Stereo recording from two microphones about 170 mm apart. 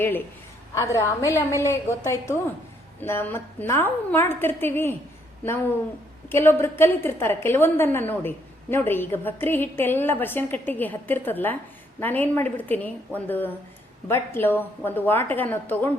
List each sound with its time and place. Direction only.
0.7 s a woman's voice: 20° left (ahead or behind)
6.2 s a woman's voice: 15° left (ahead or behind)